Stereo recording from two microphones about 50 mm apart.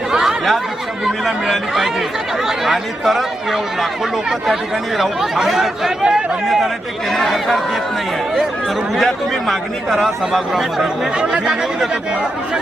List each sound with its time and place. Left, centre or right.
0.1 s a sound: centre
1.0 s speech: centre
4.9 s speech: centre
7.1 s speech: centre
9.0 s speech: centre
11.2 s speech: centre